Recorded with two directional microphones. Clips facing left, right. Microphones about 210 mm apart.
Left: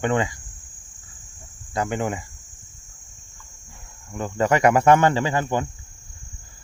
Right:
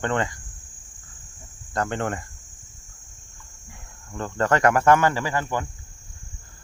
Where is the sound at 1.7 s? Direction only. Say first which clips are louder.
Left 1 dB; 10° left (ahead or behind).